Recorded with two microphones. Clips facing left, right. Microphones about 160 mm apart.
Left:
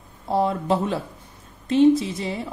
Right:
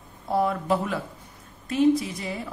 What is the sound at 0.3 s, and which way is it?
A woman's voice, 25° left (ahead or behind).